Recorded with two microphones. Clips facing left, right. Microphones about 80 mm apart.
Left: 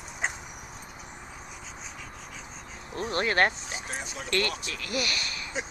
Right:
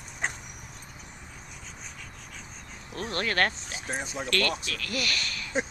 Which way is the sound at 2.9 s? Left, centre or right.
Left.